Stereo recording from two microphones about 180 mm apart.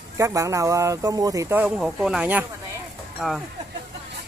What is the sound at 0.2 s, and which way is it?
Speech, 15° right (ahead or behind).